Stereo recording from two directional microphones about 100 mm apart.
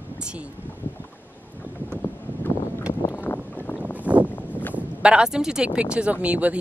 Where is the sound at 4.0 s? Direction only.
15° right (ahead or behind).